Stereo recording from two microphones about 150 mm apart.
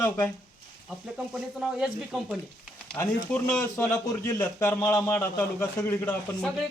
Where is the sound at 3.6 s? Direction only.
15° left (ahead or behind).